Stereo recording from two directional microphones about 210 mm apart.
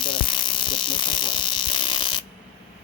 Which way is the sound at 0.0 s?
25° left (ahead or behind).